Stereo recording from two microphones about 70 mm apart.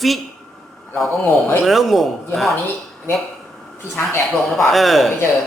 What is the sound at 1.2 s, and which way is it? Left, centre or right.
Speech, left.